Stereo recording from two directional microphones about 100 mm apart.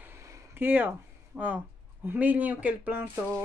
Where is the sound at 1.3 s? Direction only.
10° right (ahead or behind).